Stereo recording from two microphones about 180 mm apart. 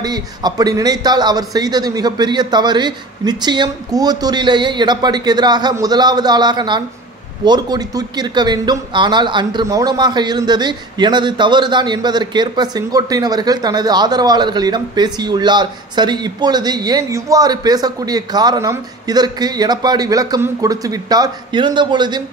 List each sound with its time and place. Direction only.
0.0 s a man's voice: 20° right (ahead or behind)